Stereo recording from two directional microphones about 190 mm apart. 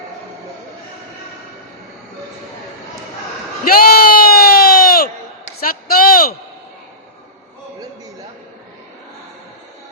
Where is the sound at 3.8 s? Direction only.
50° left (ahead or behind).